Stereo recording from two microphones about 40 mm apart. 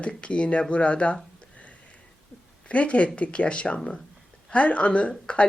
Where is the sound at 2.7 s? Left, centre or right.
Left.